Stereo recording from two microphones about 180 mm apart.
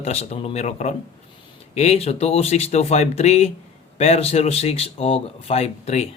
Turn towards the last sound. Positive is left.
turn(degrees=35)  # may be behind; listen again after turning